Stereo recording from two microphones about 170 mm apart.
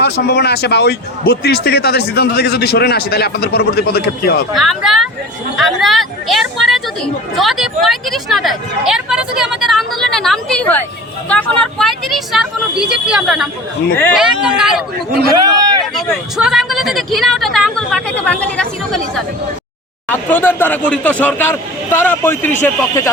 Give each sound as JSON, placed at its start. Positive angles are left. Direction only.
{"t": 0.0, "sound": "speech", "side_deg": 75}
{"t": 4.5, "sound": "speech", "side_deg": 0}
{"t": 15.3, "sound": "speech", "side_deg": -20}
{"t": 16.4, "sound": "speech", "side_deg": 0}